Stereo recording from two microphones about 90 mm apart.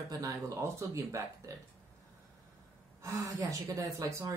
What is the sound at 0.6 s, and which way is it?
Speech, 30° right (ahead or behind).